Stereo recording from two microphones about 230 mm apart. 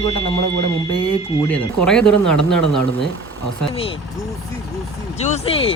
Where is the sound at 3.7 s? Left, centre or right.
Left.